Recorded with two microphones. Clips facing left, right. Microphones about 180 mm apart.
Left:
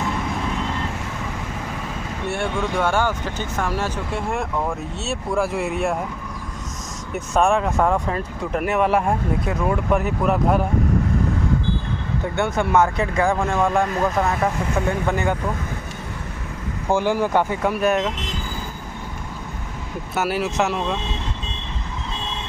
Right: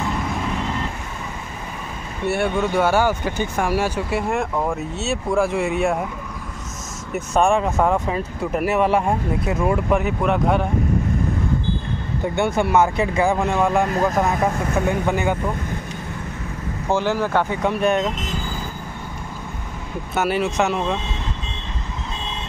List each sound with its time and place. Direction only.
2.2 s speech: 5° right (ahead or behind)
7.2 s speech: centre (ahead or behind)
12.4 s speech: 10° right (ahead or behind)
12.9 s speech: 20° right (ahead or behind)
13.3 s speech: 10° right (ahead or behind)
16.9 s speech: 10° left (ahead or behind)
20.2 s speech: 5° left (ahead or behind)